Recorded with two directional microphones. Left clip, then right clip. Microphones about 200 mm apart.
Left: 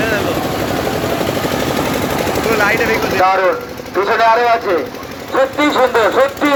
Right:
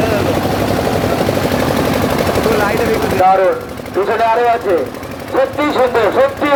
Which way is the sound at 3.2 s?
25° left (ahead or behind).